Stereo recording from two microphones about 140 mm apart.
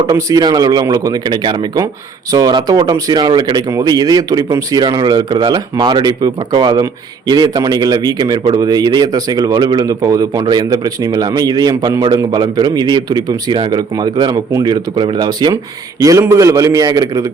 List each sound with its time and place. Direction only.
0.1 s a man's voice: 25° right (ahead or behind)